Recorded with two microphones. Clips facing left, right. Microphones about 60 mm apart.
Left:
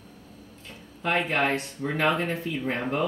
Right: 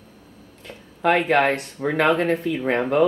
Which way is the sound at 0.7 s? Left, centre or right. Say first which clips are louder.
Right 9 dB; right.